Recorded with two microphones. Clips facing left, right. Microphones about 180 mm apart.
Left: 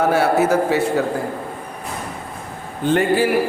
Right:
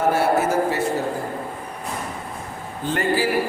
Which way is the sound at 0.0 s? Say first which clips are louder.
Left 3 dB; 70° left (ahead or behind).